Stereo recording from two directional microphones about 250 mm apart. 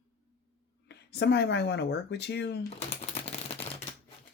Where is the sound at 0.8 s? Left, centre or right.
Left.